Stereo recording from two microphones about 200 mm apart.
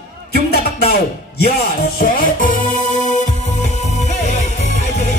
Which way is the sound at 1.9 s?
45° left (ahead or behind).